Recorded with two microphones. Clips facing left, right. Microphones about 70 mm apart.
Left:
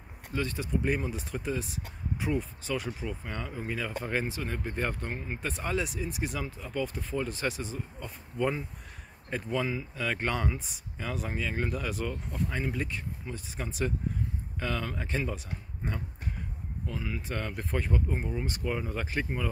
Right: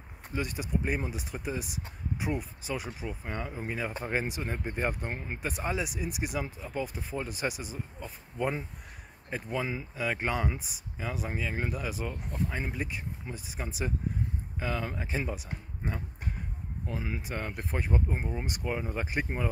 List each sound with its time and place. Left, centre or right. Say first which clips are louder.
0.3 s speech: left 1 dB; centre
16.8 s speech: even; right
17.6 s speech: left 2 dB; centre
17.9 s speech: even; right
19.2 s speech: right 1 dB; right